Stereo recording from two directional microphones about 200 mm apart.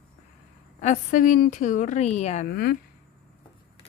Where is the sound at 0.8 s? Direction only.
40° left (ahead or behind).